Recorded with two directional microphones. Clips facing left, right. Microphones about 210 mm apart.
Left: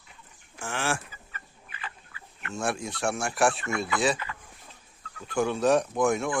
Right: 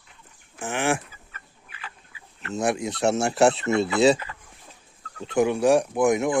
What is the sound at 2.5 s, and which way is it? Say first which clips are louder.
Speech: right 6 dB; 20° right (ahead or behind).